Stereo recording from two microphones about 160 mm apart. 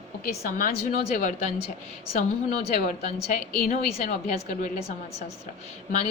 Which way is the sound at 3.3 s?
50° left (ahead or behind).